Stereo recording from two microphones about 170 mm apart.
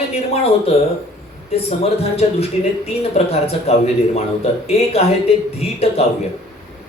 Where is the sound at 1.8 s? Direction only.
40° left (ahead or behind).